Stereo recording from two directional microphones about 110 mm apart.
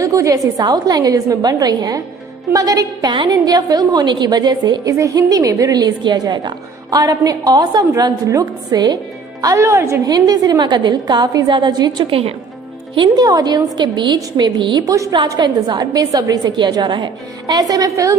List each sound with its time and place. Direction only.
0.0 s a woman's voice: 30° right (ahead or behind)
4.9 s a woman's voice: 30° right (ahead or behind)
12.1 s a woman's voice: 60° right (ahead or behind)
12.9 s speech: 50° right (ahead or behind)
13.2 s a woman's voice: 35° right (ahead or behind)
14.9 s a woman's voice: 30° right (ahead or behind)